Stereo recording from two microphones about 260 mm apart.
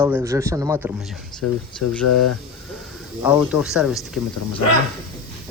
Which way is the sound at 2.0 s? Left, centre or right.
Left.